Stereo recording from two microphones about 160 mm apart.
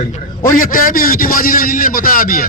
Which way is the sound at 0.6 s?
60° left (ahead or behind).